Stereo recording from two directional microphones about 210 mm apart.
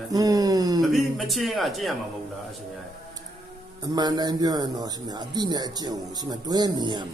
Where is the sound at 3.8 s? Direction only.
20° right (ahead or behind).